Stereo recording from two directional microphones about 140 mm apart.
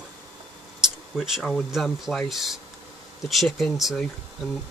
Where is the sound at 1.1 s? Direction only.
5° right (ahead or behind).